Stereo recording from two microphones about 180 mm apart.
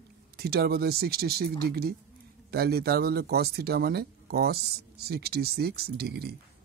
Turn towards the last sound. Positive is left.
turn(degrees=-60)  # may be behind; listen again after turning